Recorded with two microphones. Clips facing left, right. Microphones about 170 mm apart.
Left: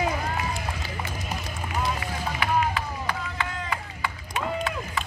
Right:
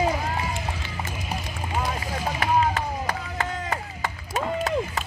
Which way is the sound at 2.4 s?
45° right (ahead or behind).